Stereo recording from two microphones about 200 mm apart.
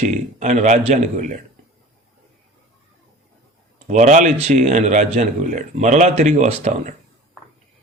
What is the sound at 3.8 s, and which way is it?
A man's voice, 35° right (ahead or behind).